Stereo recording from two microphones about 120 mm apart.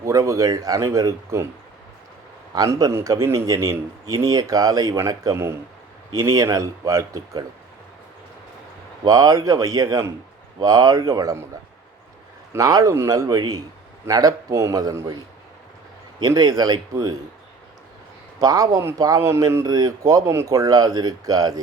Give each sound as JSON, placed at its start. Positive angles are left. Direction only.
{"t": 0.0, "sound": "speech", "side_deg": -25}
{"t": 2.6, "sound": "speech", "side_deg": -30}
{"t": 9.0, "sound": "speech", "side_deg": -30}
{"t": 12.5, "sound": "speech", "side_deg": -30}
{"t": 16.2, "sound": "speech", "side_deg": -30}
{"t": 18.3, "sound": "speech", "side_deg": -30}